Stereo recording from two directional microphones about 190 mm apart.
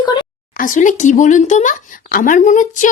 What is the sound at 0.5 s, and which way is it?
Speech, 45° left (ahead or behind).